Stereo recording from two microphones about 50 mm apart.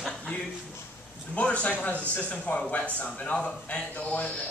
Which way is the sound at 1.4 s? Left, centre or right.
Left.